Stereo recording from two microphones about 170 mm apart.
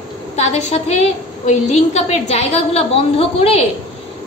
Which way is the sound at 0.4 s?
40° left (ahead or behind).